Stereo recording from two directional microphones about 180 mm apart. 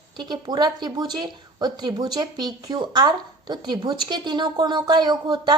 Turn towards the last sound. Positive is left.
turn(degrees=-25)  # may be behind; listen again after turning